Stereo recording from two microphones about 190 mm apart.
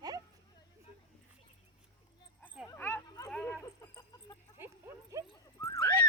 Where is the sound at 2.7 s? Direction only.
10° left (ahead or behind).